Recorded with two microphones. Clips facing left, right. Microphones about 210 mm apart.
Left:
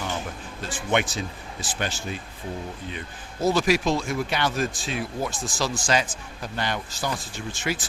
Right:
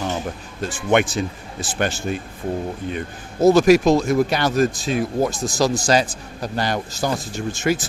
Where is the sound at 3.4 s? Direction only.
45° right (ahead or behind).